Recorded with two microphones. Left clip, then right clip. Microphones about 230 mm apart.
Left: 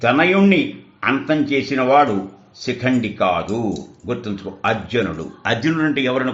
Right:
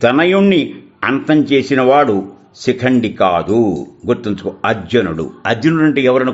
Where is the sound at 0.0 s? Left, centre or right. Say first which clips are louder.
Right 4 dB; right.